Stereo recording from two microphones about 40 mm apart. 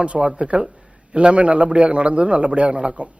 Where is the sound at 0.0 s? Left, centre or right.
Right.